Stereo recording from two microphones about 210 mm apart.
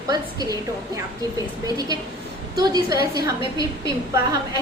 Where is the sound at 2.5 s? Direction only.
20° right (ahead or behind).